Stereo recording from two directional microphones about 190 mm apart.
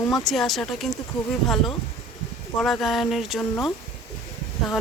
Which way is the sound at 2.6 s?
Centre (ahead or behind).